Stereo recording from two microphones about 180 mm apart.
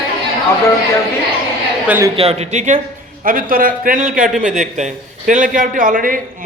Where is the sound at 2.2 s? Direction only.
35° right (ahead or behind).